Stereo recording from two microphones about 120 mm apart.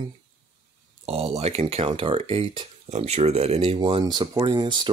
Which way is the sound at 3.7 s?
40° right (ahead or behind).